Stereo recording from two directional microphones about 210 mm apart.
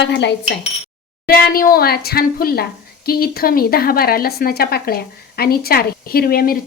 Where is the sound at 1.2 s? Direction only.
45° left (ahead or behind).